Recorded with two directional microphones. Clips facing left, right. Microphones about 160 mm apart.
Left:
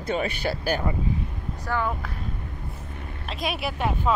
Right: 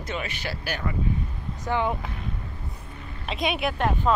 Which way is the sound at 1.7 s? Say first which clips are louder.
Right 2 dB; 20° right (ahead or behind).